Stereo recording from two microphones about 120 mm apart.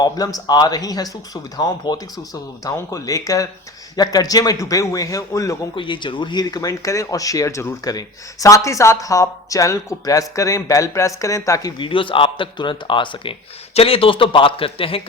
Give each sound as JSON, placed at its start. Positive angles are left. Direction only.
{"t": 0.0, "sound": "speech", "side_deg": 30}
{"t": 5.7, "sound": "speech", "side_deg": 45}
{"t": 11.8, "sound": "speech", "side_deg": 45}